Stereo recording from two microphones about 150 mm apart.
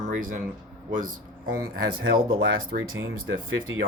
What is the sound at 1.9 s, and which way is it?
Speech, 75° right (ahead or behind).